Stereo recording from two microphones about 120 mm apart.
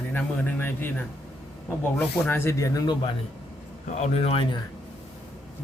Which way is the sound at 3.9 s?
65° left (ahead or behind).